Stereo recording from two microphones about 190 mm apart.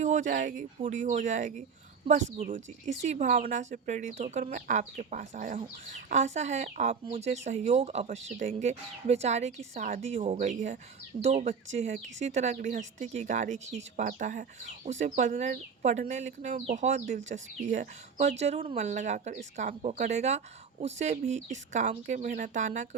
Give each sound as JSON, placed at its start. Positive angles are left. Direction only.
{"t": 0.0, "sound": "speech", "side_deg": -40}